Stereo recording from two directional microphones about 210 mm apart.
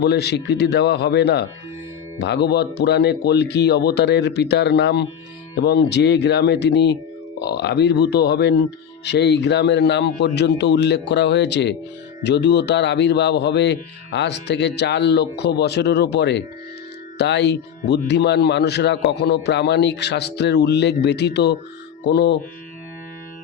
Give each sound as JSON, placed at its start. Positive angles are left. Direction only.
{"t": 0.0, "sound": "speech", "side_deg": 50}